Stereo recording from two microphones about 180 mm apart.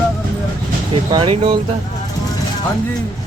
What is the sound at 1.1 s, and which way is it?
Speech, 30° right (ahead or behind).